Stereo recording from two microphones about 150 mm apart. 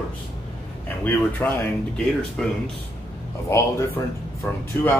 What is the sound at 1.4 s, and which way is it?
Speech, 15° left (ahead or behind).